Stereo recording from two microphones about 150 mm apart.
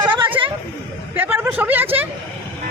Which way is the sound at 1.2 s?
15° right (ahead or behind).